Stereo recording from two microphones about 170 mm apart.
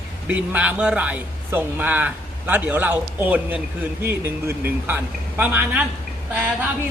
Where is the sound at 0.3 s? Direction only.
10° right (ahead or behind).